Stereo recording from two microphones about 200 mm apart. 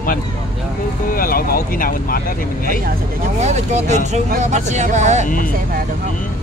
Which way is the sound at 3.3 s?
35° right (ahead or behind).